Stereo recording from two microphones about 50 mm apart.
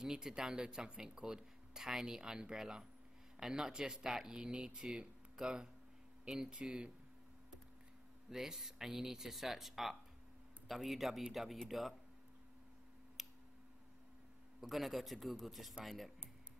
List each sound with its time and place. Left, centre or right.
0.0 s speech: centre
8.3 s a man's voice: centre
13.2 s tick: centre
14.6 s a man's voice: centre